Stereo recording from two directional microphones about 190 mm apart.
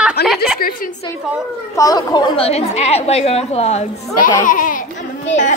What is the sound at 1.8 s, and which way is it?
A woman's voice, 20° left (ahead or behind).